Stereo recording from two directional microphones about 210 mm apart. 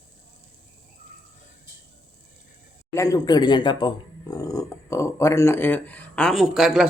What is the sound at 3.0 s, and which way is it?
Speech, 15° left (ahead or behind).